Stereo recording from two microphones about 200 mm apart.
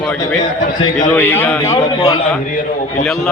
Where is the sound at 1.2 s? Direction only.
10° left (ahead or behind).